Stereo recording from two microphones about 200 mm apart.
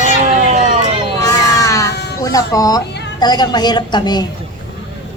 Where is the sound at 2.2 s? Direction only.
15° left (ahead or behind).